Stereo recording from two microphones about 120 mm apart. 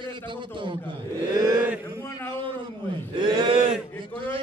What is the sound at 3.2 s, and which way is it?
Speech, 40° right (ahead or behind).